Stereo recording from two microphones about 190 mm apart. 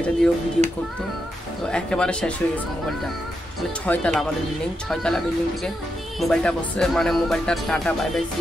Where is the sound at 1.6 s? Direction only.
5° left (ahead or behind).